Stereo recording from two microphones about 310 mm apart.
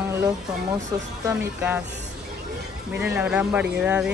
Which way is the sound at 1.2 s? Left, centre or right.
Centre.